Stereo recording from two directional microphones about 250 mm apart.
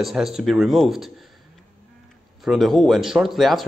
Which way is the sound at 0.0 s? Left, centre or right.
Centre.